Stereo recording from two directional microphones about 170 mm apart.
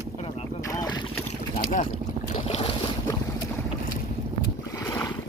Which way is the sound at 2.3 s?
35° left (ahead or behind).